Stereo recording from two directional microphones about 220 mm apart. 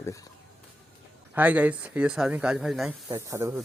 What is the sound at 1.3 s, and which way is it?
Speech, 5° right (ahead or behind).